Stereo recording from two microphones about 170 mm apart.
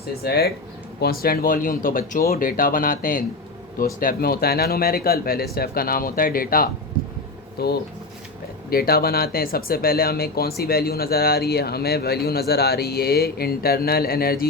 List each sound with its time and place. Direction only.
0.2 s speech: 70° left (ahead or behind)
7.6 s speech: 70° left (ahead or behind)